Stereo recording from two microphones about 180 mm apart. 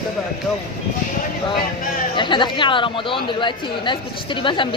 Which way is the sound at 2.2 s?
25° left (ahead or behind).